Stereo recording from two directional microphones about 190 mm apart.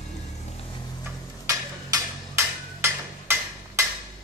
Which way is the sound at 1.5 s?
15° right (ahead or behind).